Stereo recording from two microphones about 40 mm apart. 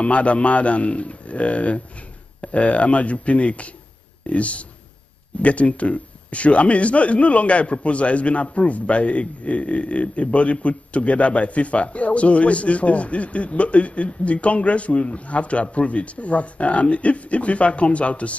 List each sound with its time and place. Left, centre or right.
0.0 s a man's voice: left